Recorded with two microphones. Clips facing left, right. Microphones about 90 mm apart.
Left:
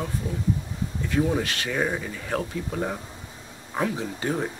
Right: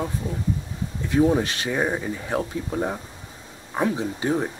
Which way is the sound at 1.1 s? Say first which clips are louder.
Right 5 dB; 20° right (ahead or behind).